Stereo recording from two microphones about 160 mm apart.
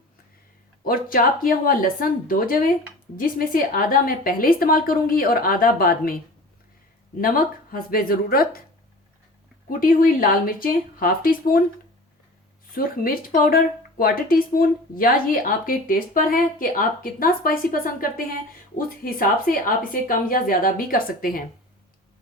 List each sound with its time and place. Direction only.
0.9 s speech: 60° left (ahead or behind)
7.2 s speech: 65° left (ahead or behind)
9.6 s speech: 60° left (ahead or behind)
12.7 s speech: 65° left (ahead or behind)
18.8 s speech: 60° left (ahead or behind)